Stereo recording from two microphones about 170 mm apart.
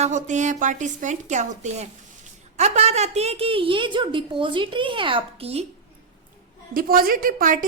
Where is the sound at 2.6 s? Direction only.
40° right (ahead or behind).